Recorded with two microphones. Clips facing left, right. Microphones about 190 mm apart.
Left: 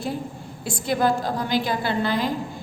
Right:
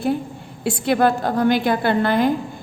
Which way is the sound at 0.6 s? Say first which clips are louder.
Right 5 dB; 65° right (ahead or behind).